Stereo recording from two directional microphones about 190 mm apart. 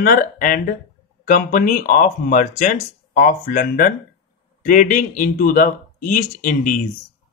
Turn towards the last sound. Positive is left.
turn(degrees=45)  # may be behind; listen again after turning